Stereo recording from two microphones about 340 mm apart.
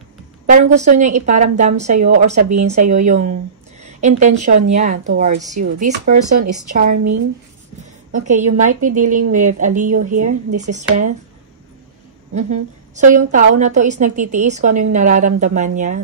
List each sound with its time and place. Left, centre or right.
0.5 s a woman's voice: right
7.8 s a woman's voice: right
12.4 s a woman's voice: right